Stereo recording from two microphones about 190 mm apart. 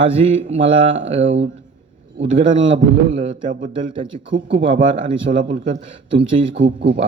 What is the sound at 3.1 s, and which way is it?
Speech, 40° right (ahead or behind).